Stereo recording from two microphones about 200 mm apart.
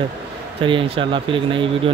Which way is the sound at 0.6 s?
25° right (ahead or behind).